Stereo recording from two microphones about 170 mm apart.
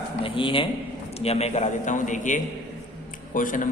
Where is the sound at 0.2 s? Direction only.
30° left (ahead or behind).